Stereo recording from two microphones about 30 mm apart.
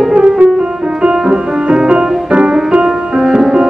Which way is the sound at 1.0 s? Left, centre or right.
Right.